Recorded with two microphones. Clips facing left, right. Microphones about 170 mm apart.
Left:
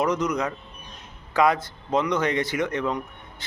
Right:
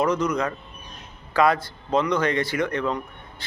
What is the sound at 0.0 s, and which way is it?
A man's voice, 20° left (ahead or behind).